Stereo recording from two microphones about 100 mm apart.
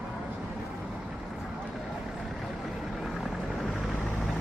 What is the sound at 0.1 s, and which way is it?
Vehicle, 5° right (ahead or behind).